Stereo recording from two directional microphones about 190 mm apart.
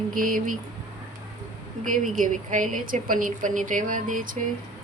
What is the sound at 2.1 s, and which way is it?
A woman's voice, 40° right (ahead or behind).